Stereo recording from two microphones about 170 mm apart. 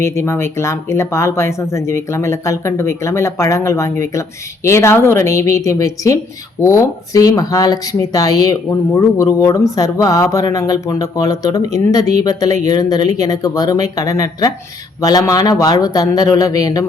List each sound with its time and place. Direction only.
0.0 s a woman's voice: 15° left (ahead or behind)